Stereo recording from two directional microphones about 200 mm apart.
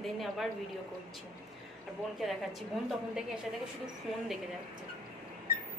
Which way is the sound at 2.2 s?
Centre (ahead or behind).